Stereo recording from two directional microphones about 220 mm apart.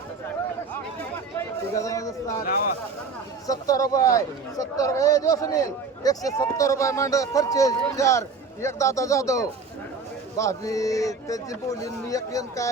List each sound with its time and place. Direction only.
1.7 s speech: 15° left (ahead or behind)
2.4 s speech: 40° left (ahead or behind)
3.4 s speech: 15° left (ahead or behind)